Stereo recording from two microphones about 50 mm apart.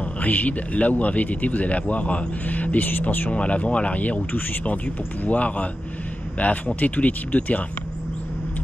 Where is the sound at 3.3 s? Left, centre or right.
Left.